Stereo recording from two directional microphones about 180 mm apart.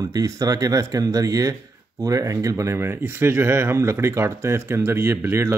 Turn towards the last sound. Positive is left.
turn(degrees=-15)  # may be behind; listen again after turning